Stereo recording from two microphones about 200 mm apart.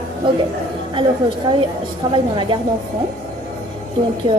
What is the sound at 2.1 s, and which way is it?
Speech, 25° right (ahead or behind).